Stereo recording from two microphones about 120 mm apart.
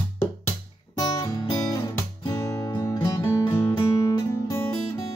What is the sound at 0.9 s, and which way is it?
Guitar, 30° left (ahead or behind).